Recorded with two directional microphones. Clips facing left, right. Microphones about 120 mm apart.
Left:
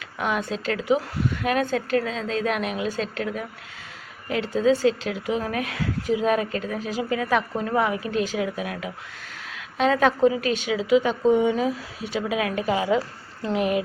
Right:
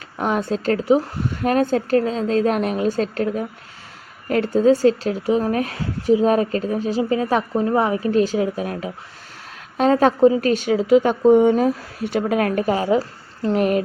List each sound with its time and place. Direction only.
0.2 s a woman's voice: 35° right (ahead or behind)